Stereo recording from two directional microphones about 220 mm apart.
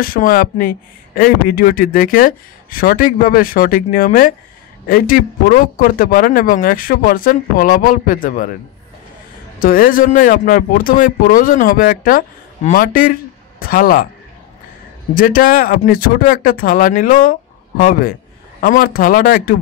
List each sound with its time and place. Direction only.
0.0 s speech: 40° left (ahead or behind)
9.6 s speech: 40° left (ahead or behind)
15.1 s speech: 40° left (ahead or behind)